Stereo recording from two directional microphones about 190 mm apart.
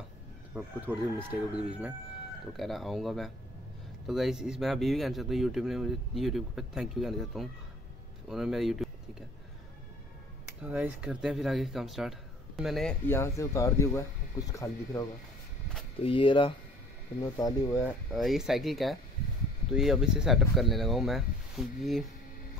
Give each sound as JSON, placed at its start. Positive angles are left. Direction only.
{"t": 0.6, "sound": "speech", "side_deg": -10}
{"t": 10.6, "sound": "speech", "side_deg": -5}
{"t": 13.0, "sound": "speech", "side_deg": 10}
{"t": 16.0, "sound": "speech", "side_deg": 30}
{"t": 18.1, "sound": "speech", "side_deg": 0}